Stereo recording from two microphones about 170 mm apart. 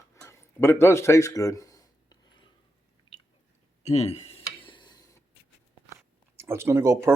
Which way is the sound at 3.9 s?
40° left (ahead or behind).